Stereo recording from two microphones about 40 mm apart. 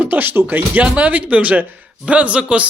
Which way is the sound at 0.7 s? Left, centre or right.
Right.